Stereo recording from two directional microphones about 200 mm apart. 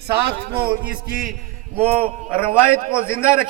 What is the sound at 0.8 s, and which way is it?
Speech, 5° right (ahead or behind).